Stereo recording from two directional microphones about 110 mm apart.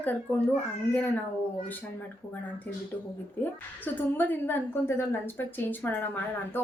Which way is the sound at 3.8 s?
15° left (ahead or behind).